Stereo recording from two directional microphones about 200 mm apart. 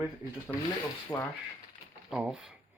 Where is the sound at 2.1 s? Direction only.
5° right (ahead or behind).